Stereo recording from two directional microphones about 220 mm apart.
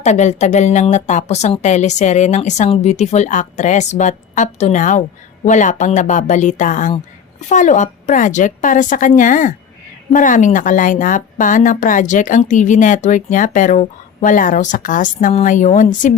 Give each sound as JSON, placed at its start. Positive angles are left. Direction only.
{"t": 0.0, "sound": "a woman's voice", "side_deg": 30}